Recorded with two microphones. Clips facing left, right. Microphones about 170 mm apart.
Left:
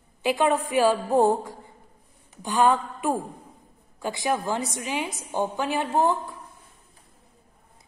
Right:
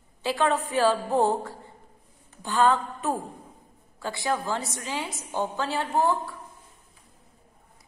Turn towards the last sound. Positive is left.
turn(degrees=20)  # may be behind; listen again after turning